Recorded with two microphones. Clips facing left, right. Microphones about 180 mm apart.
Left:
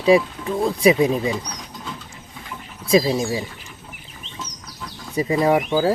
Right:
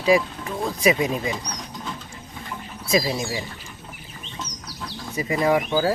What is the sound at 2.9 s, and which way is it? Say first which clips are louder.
Speech: left 5 dB; 30° left (ahead or behind).